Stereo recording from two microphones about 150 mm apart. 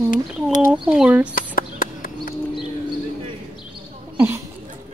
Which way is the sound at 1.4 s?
70° left (ahead or behind).